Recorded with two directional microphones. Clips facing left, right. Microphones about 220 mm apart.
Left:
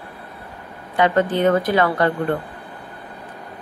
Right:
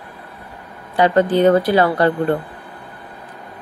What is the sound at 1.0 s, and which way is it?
Speech, 35° right (ahead or behind).